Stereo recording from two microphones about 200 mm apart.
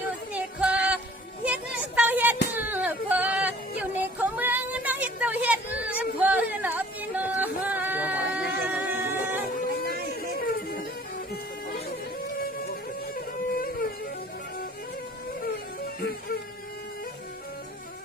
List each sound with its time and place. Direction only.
0.3 s music: 5° right (ahead or behind)
2.0 s a sound: 10° right (ahead or behind)
9.6 s music: 45° left (ahead or behind)
13.1 s music: 45° left (ahead or behind)